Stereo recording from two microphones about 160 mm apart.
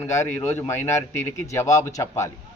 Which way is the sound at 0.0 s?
15° left (ahead or behind).